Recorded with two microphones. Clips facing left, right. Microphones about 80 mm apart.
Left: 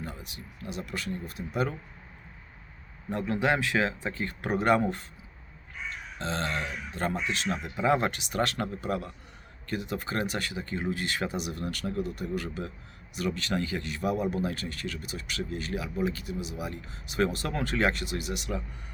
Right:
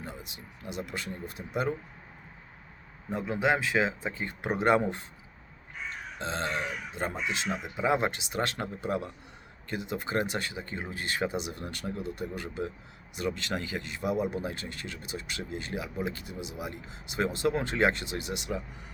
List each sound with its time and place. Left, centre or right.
0.0 s speech: right
3.1 s speech: centre
6.1 s speech: right